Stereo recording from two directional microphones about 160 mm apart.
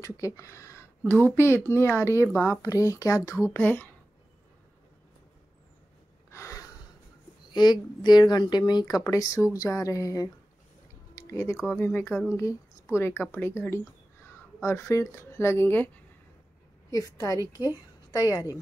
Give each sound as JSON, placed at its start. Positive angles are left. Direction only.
{"t": 0.0, "sound": "speech", "side_deg": 20}
{"t": 6.3, "sound": "a sound", "side_deg": 20}
{"t": 7.5, "sound": "speech", "side_deg": 25}
{"t": 11.1, "sound": "music", "side_deg": 20}
{"t": 11.5, "sound": "speech", "side_deg": -5}
{"t": 11.8, "sound": "speech", "side_deg": 15}
{"t": 12.4, "sound": "speech", "side_deg": 20}
{"t": 16.9, "sound": "speech", "side_deg": 20}